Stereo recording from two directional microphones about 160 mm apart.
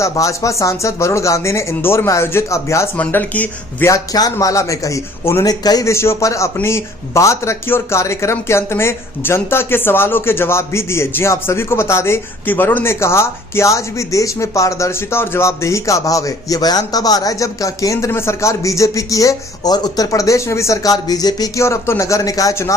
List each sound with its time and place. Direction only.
0.0 s speech: 20° left (ahead or behind)